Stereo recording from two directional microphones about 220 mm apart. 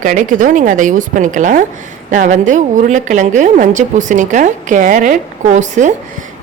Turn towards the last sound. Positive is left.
turn(degrees=-35)  # may be behind; listen again after turning